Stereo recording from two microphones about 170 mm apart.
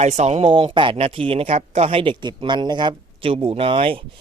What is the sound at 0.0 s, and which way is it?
Speech, 40° right (ahead or behind).